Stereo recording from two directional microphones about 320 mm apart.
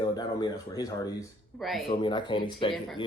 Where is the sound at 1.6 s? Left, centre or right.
Centre.